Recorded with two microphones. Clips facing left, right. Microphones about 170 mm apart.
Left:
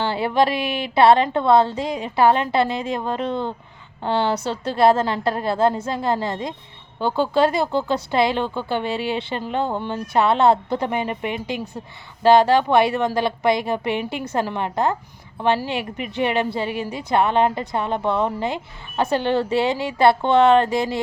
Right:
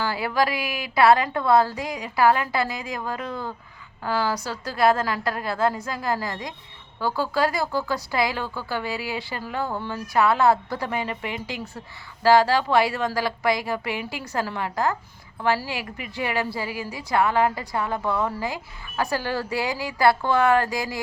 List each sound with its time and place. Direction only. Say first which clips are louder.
0.0 s a woman's voice: left 4 dB; 25° left (ahead or behind)